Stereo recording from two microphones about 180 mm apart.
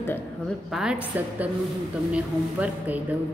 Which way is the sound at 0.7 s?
Centre (ahead or behind).